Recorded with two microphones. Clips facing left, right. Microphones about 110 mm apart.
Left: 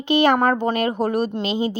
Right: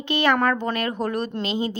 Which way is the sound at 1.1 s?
10° left (ahead or behind).